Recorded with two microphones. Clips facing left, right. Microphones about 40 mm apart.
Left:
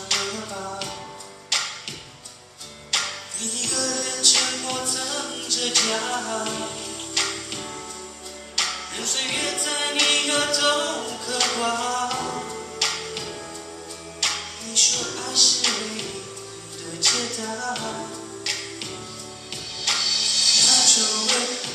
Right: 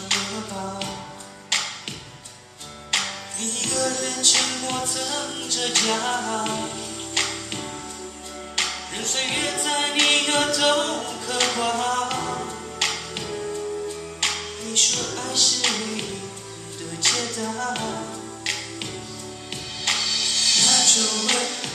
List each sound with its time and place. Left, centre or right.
1.5 s music: right
2.9 s music: right
4.6 s a capella: right
5.1 s music: right
8.5 s music: right
9.1 s a capella: right
11.2 s music: right